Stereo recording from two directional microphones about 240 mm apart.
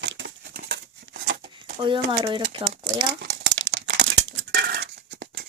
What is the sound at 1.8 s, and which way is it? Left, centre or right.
Speech, centre.